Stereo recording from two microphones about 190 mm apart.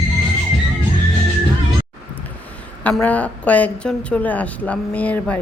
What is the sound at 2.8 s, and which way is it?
A woman's voice, 10° left (ahead or behind).